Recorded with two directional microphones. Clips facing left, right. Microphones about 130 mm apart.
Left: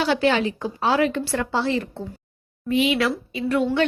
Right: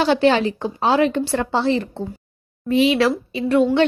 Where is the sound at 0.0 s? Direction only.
30° right (ahead or behind).